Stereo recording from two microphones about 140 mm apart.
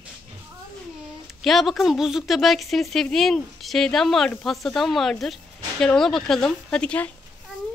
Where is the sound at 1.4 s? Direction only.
Centre (ahead or behind).